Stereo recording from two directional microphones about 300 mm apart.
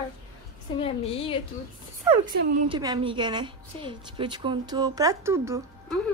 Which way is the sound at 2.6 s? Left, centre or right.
Centre.